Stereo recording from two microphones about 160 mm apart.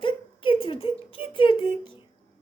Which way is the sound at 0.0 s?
30° left (ahead or behind).